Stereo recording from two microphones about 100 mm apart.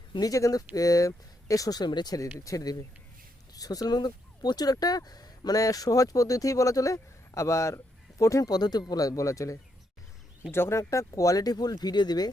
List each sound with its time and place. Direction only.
0.1 s speech: 40° left (ahead or behind)